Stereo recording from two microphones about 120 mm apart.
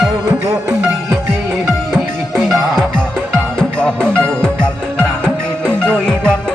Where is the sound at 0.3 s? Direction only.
30° right (ahead or behind).